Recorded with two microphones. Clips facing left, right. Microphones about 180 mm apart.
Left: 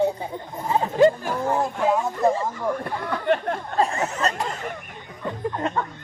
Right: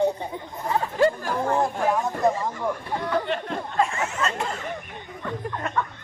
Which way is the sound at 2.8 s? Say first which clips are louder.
Right 2 dB; 55° left (ahead or behind).